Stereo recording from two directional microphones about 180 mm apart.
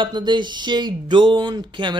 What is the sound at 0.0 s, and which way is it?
Speech, 25° right (ahead or behind).